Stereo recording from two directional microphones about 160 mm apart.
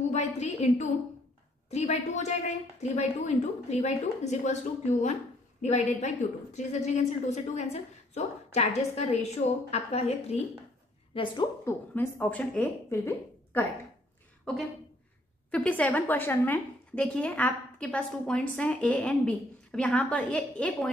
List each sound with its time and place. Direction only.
0.1 s a woman's voice: 45° left (ahead or behind)
5.6 s a woman's voice: 45° left (ahead or behind)
11.6 s a woman's voice: 15° left (ahead or behind)
15.5 s a woman's voice: 10° left (ahead or behind)